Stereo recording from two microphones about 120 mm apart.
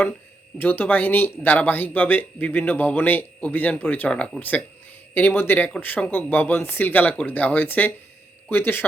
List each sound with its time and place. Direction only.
0.6 s a man's voice: 15° left (ahead or behind)